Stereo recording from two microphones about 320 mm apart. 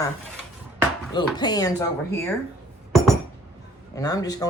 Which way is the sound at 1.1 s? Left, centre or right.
Centre.